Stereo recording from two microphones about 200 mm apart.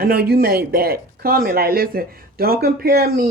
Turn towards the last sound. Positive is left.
turn(degrees=-50)  # may be behind; listen again after turning